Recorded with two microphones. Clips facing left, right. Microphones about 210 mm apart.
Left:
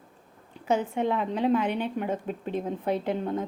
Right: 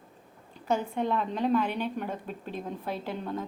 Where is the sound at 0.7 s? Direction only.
15° left (ahead or behind).